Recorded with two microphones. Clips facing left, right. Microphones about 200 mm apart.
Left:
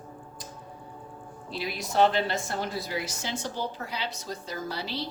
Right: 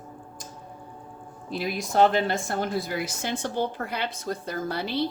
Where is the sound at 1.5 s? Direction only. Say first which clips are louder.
Right 5 dB; 50° right (ahead or behind).